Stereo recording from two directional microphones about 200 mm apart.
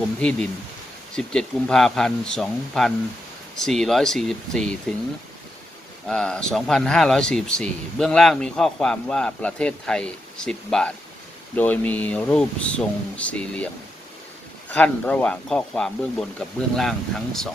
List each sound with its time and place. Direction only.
0.2 s speech: 5° left (ahead or behind)
6.1 s speech: 5° left (ahead or behind)
14.7 s speech: 5° left (ahead or behind)